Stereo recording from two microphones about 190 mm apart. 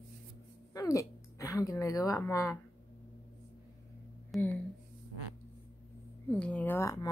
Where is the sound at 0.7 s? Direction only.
20° left (ahead or behind).